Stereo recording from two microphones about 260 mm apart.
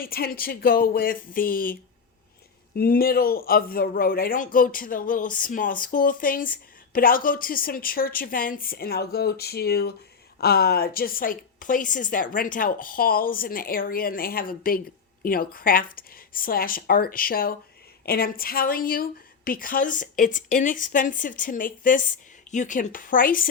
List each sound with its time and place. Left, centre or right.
0.0 s a man's voice: left
2.7 s a man's voice: left